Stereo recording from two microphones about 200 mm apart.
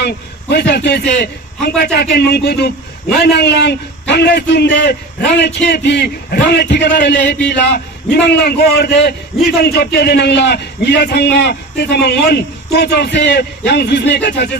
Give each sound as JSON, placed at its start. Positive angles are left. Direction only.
{"t": 0.0, "sound": "a man's voice", "side_deg": 55}